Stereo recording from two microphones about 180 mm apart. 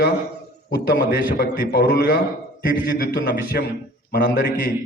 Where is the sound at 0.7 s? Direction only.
60° left (ahead or behind).